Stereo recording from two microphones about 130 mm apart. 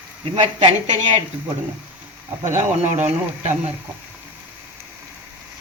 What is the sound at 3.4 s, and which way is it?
Speech, 60° right (ahead or behind).